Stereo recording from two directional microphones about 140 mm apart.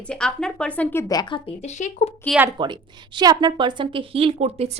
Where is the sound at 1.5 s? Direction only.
55° left (ahead or behind).